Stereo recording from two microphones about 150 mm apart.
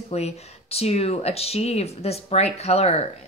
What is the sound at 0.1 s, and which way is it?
A woman's voice, 45° left (ahead or behind).